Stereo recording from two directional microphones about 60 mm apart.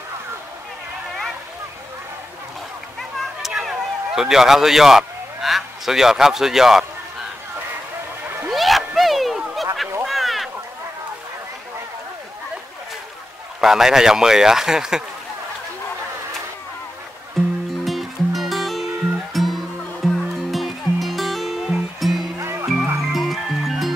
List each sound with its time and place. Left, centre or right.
3.0 s a sound: centre
8.5 s a sound: centre
13.6 s a man's voice: centre
17.4 s music: centre
22.4 s music: right
23.1 s music: centre